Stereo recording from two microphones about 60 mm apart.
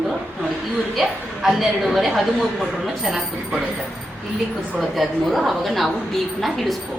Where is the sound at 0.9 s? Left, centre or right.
Centre.